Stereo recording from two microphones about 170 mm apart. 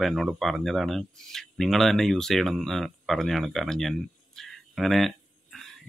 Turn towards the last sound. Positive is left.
turn(degrees=0)  # may be behind; listen again after turning